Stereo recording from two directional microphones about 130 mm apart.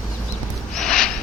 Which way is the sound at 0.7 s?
5° left (ahead or behind).